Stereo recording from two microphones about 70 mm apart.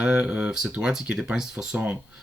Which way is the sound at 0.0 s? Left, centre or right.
Centre.